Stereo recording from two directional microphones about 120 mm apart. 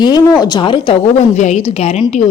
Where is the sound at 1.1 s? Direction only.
75° left (ahead or behind); by 2.0 s 55° left (ahead or behind).